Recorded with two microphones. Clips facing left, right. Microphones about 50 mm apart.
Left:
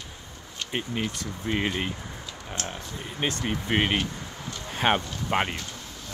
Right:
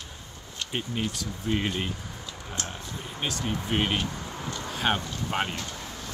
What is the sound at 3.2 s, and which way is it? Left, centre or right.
Speech, left.